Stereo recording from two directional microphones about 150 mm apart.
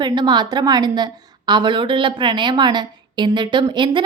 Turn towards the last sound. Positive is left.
turn(degrees=-30)  # may be behind; listen again after turning